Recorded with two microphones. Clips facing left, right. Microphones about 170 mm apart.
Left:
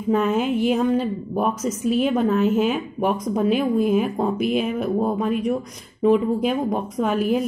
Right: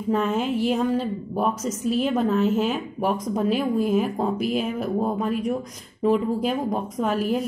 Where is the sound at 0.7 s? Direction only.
5° left (ahead or behind).